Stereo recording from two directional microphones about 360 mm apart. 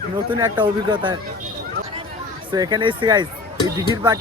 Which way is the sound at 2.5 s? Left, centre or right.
Centre.